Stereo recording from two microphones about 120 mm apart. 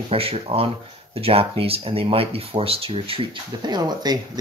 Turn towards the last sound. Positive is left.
turn(degrees=-35)  # may be behind; listen again after turning